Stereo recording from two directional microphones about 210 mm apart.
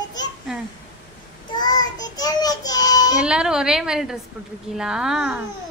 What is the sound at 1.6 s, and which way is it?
Child singing, 20° left (ahead or behind).